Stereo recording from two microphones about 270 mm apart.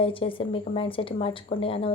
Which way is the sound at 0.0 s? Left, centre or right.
Centre.